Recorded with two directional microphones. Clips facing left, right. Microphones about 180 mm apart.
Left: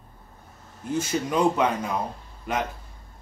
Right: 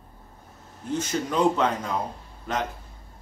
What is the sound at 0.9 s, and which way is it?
Speech, 10° left (ahead or behind).